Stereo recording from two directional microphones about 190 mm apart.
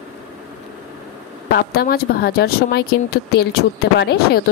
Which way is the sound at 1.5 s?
55° left (ahead or behind).